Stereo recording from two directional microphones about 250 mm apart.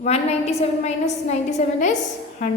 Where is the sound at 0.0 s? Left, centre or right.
Left.